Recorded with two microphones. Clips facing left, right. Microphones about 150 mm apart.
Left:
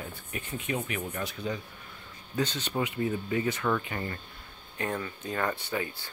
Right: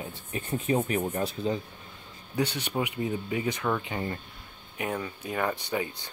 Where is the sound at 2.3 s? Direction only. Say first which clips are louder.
Right 1 dB; 15° right (ahead or behind).